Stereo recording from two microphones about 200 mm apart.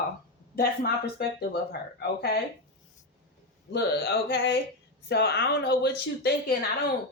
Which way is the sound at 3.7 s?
55° left (ahead or behind).